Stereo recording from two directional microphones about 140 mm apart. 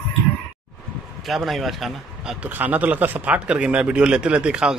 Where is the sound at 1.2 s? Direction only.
Centre (ahead or behind).